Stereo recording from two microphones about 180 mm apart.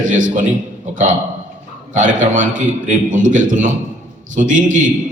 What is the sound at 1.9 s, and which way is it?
A man's voice, 45° right (ahead or behind).